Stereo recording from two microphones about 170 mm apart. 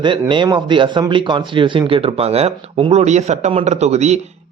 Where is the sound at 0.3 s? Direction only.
25° right (ahead or behind).